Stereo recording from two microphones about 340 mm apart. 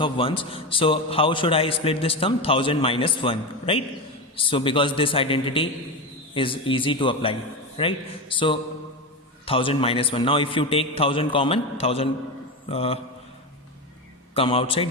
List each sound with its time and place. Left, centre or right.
0.0 s a man's voice: centre
14.3 s a man's voice: centre